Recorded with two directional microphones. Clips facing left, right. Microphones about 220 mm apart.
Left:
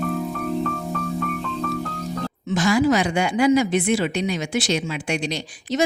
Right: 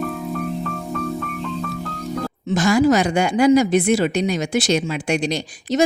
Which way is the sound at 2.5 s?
45° right (ahead or behind).